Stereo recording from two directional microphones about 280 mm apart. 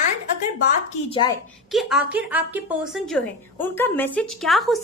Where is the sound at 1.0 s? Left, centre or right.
Centre.